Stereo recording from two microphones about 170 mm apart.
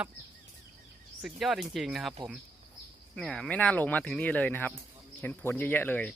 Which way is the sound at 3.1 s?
5° left (ahead or behind).